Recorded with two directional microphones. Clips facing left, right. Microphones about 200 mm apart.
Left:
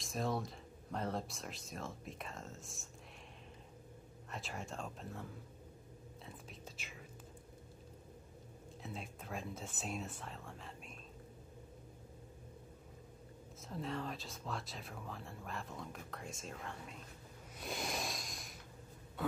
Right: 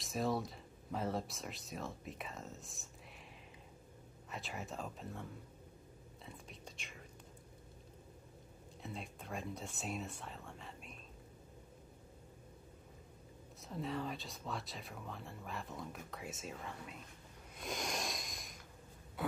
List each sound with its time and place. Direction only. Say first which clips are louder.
0.0 s speech: right 2 dB; centre (ahead or behind)
4.3 s speech: even; centre (ahead or behind)
6.2 s whispering: right 1 dB; centre (ahead or behind)
8.8 s speech: right 1 dB; centre (ahead or behind)
13.6 s speech: right 1 dB; centre (ahead or behind)
17.6 s a sound: even; 5° left (ahead or behind)